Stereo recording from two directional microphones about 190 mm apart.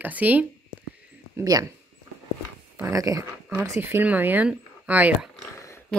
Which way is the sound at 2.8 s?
15° right (ahead or behind).